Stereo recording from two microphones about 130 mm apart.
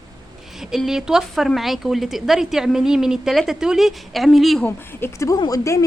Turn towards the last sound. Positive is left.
turn(degrees=25)  # may be behind; listen again after turning